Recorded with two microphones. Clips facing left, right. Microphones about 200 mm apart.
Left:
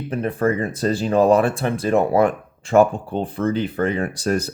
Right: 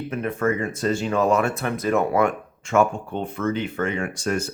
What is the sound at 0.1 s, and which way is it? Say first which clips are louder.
Speech: left 4 dB; 35° left (ahead or behind).